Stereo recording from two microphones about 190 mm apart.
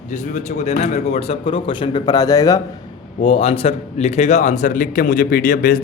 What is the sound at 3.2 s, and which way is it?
Speech, 30° left (ahead or behind).